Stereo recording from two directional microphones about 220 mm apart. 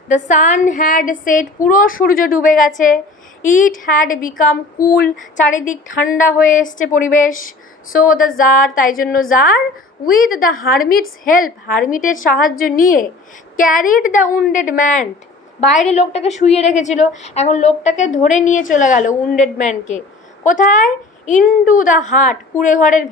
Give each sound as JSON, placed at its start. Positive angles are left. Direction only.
{"t": 0.1, "sound": "a woman's voice", "side_deg": 35}
{"t": 4.9, "sound": "a sound", "side_deg": 40}
{"t": 5.7, "sound": "a woman's voice", "side_deg": 35}